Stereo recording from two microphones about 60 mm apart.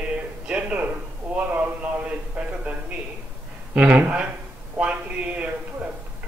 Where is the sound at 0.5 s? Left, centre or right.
Right.